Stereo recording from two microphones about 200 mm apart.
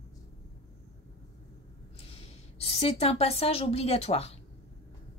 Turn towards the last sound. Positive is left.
turn(degrees=30)  # may be behind; listen again after turning